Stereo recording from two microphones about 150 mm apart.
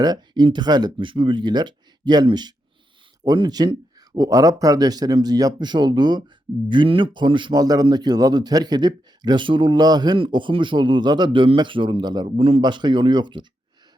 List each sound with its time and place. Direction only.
0.0 s a man's voice: 30° right (ahead or behind)